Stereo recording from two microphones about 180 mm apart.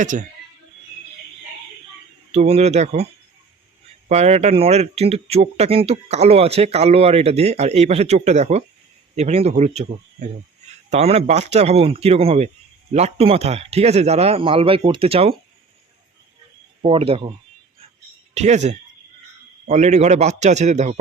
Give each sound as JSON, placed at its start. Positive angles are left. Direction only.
{"t": 0.0, "sound": "speech", "side_deg": -45}
{"t": 2.3, "sound": "speech", "side_deg": -35}
{"t": 4.1, "sound": "speech", "side_deg": -35}
{"t": 16.8, "sound": "speech", "side_deg": -30}
{"t": 18.3, "sound": "speech", "side_deg": -40}